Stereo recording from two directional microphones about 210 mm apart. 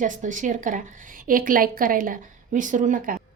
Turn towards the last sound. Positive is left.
turn(degrees=-40)  # may be behind; listen again after turning